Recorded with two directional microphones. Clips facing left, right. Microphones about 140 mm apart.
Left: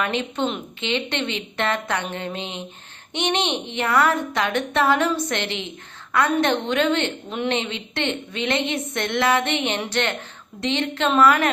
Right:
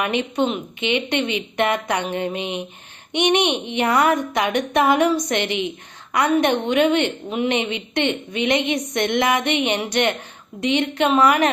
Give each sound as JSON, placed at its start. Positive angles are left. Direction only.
{"t": 0.0, "sound": "a woman's voice", "side_deg": -15}